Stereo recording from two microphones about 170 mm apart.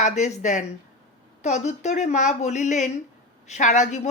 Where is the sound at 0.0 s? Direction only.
40° left (ahead or behind).